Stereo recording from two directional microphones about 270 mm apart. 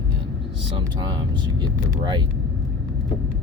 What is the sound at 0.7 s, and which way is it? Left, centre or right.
Speech, centre.